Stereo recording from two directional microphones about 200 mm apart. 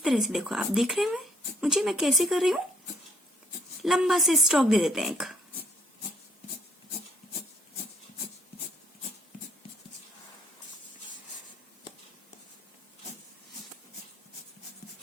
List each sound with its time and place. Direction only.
0.0 s speech: centre (ahead or behind)
3.8 s speech: centre (ahead or behind)